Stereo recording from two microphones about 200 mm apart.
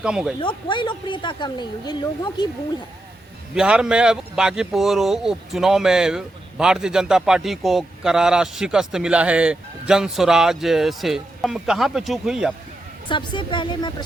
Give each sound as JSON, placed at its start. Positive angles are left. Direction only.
{"t": 0.0, "sound": "speech", "side_deg": -5}
{"t": 0.3, "sound": "speech", "side_deg": 25}
{"t": 3.5, "sound": "speech", "side_deg": -5}
{"t": 13.1, "sound": "speech", "side_deg": 25}